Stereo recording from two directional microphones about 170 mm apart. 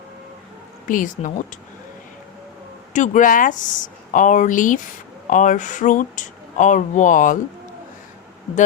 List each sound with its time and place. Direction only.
0.9 s speech: 50° left (ahead or behind)
2.9 s speech: 45° left (ahead or behind)